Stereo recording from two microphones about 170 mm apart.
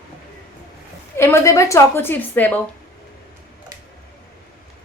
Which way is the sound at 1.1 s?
15° left (ahead or behind).